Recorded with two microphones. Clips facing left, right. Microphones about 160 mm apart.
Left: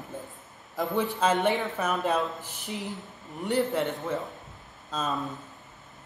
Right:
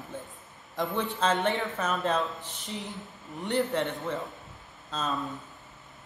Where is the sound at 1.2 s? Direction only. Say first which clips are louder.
Left 2 dB; 10° left (ahead or behind).